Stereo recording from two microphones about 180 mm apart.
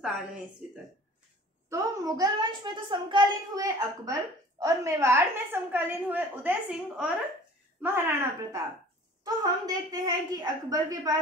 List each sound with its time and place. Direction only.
1.7 s a woman's voice: 20° right (ahead or behind)